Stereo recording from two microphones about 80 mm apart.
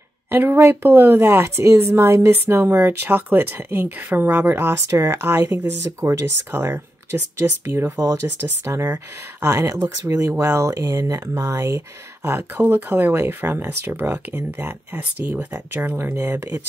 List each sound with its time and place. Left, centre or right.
0.3 s a woman's voice: right